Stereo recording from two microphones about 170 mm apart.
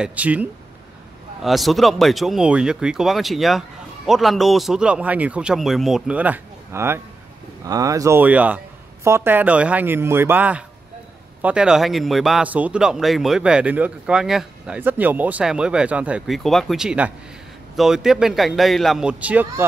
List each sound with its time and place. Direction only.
0.0 s a man's voice: 10° right (ahead or behind)